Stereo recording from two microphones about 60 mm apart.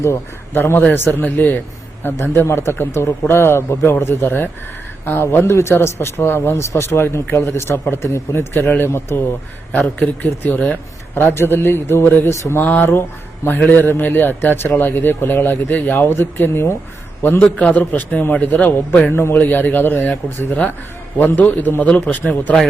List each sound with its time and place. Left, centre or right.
0.0 s a man's voice: left
9.7 s a man's voice: left
11.1 s a man's voice: left
12.3 s speech: left
12.6 s a man's voice: left
13.0 s speech: left
13.6 s a man's voice: left
17.4 s a man's voice: left
19.1 s a man's voice: left
19.4 s a man's voice: left
21.8 s a man's voice: centre